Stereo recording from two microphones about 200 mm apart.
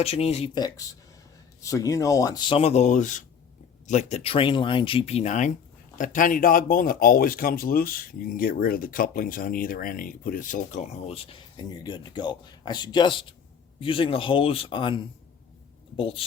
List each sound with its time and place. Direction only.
0.0 s speech: 30° left (ahead or behind)